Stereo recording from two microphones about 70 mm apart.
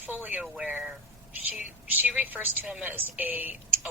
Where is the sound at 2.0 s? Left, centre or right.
Right.